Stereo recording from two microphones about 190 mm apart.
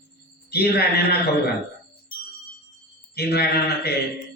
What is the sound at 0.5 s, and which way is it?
Speech, 55° left (ahead or behind).